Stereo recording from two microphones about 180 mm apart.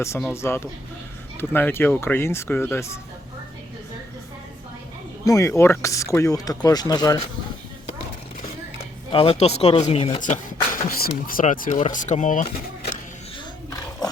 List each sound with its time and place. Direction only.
0.0 s speech: 15° left (ahead or behind)
5.2 s speech: 15° left (ahead or behind)
9.1 s speech: 35° left (ahead or behind)
10.3 s speech: 50° left (ahead or behind)
14.0 s roaring cats: 20° left (ahead or behind)